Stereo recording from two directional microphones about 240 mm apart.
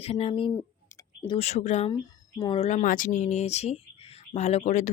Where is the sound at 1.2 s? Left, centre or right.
Left.